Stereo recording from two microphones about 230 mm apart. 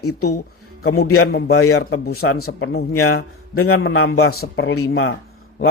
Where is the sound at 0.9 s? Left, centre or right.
Left.